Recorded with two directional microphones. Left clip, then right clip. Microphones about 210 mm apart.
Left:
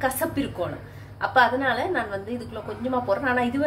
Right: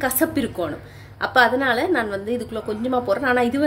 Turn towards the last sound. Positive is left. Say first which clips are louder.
# right 4 dB
turn(degrees=-50)  # may be behind; listen again after turning